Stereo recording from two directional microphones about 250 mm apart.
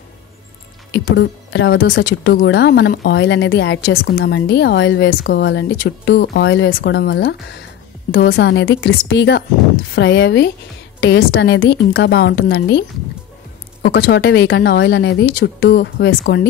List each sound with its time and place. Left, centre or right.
0.9 s speech: left
13.8 s speech: left